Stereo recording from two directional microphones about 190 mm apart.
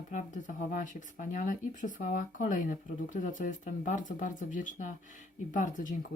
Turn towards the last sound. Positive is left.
turn(degrees=40)  # may be behind; listen again after turning